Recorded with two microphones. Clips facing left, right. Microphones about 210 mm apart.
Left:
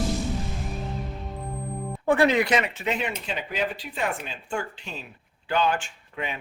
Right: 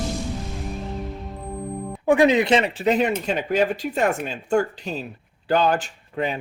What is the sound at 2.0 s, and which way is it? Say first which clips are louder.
Speech: right 4 dB; 15° right (ahead or behind).